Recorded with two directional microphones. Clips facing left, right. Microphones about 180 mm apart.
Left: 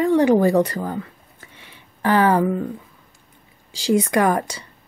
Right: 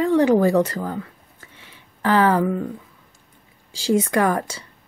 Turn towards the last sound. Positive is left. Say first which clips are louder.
# left 1 dB
turn(degrees=15)  # may be behind; listen again after turning